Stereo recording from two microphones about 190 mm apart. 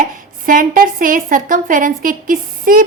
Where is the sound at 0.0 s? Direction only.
45° right (ahead or behind).